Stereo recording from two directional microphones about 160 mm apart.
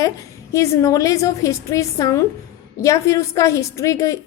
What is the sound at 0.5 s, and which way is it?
A woman's voice, 20° left (ahead or behind).